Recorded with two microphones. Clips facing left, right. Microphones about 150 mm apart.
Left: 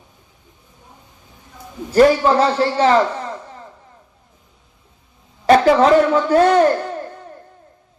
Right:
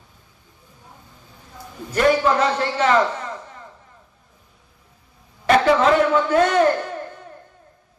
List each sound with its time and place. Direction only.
1.9 s a man's voice: 35° left (ahead or behind)
5.5 s a man's voice: 35° left (ahead or behind)